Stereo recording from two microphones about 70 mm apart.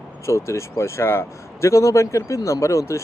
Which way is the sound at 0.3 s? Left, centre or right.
Left.